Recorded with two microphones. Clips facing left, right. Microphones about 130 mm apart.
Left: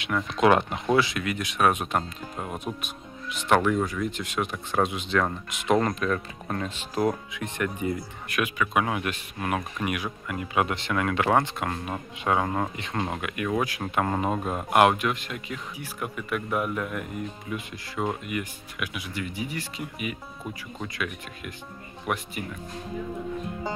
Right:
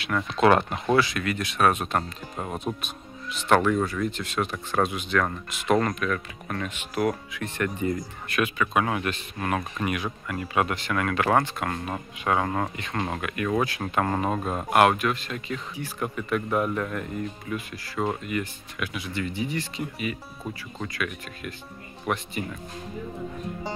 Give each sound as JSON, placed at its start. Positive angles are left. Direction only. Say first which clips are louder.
{"t": 0.4, "sound": "speech", "louder": "right 1 dB", "side_deg": 15}
{"t": 2.3, "sound": "speech", "louder": "right 2 dB", "side_deg": -5}
{"t": 2.6, "sound": "speech", "louder": "right 2 dB", "side_deg": 15}